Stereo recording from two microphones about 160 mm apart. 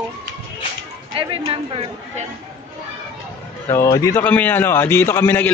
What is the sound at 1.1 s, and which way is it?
A woman's voice, 35° right (ahead or behind).